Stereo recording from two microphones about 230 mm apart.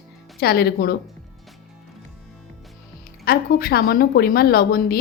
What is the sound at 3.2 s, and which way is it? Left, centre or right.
A woman's voice, left.